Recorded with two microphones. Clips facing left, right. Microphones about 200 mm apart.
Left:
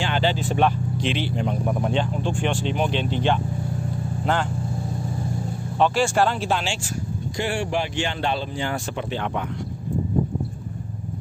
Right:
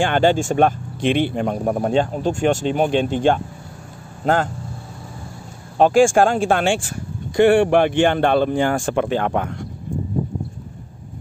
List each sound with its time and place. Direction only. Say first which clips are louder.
0.0 s speech: right 7 dB; 50° right (ahead or behind)
5.8 s speech: right 7 dB; 50° right (ahead or behind)